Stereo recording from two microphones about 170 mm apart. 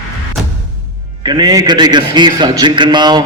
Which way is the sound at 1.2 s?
25° right (ahead or behind).